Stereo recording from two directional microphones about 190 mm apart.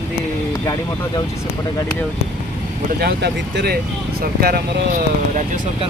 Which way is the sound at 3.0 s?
60° right (ahead or behind).